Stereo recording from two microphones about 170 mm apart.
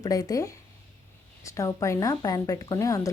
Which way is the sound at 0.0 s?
20° left (ahead or behind).